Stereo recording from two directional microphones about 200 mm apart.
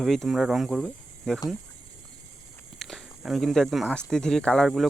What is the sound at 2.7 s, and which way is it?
Speech, centre (ahead or behind).